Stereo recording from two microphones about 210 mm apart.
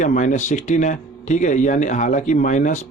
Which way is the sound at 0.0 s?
35° left (ahead or behind).